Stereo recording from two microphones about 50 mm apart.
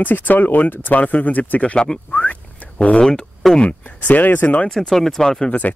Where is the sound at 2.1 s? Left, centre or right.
Left.